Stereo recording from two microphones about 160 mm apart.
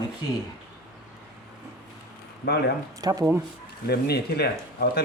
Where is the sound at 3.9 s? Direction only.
90° left.